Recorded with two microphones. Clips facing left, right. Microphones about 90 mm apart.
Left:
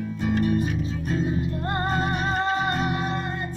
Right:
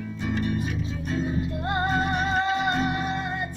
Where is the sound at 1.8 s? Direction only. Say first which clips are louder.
Right 1 dB; 40° left (ahead or behind).